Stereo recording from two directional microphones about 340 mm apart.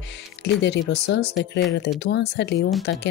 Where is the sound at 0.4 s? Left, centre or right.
Left.